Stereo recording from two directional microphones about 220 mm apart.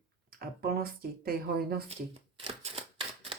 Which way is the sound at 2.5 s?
25° right (ahead or behind).